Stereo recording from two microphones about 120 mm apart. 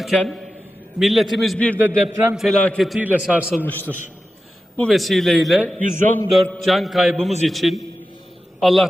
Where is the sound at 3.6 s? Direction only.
15° left (ahead or behind).